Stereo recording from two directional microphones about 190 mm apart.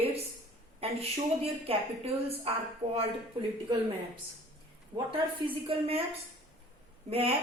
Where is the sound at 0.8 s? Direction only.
30° right (ahead or behind).